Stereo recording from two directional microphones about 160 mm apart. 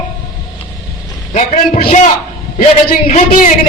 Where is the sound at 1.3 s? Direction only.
45° left (ahead or behind).